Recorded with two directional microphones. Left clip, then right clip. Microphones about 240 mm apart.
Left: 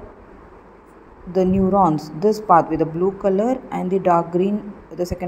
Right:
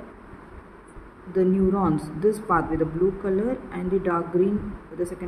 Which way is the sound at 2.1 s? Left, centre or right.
Left.